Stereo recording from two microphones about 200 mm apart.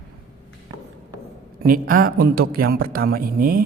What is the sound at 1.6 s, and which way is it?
A man's voice, 45° right (ahead or behind).